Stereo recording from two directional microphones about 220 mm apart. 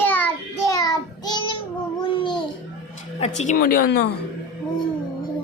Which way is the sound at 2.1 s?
20° left (ahead or behind).